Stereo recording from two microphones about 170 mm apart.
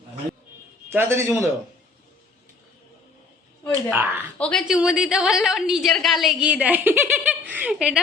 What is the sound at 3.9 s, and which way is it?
Speech, 10° right (ahead or behind).